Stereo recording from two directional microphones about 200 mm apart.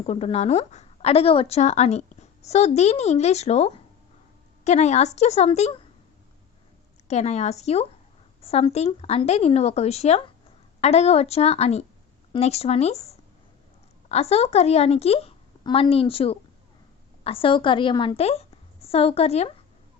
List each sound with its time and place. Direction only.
0.0 s a woman's voice: 30° left (ahead or behind)
7.1 s a woman's voice: 35° left (ahead or behind)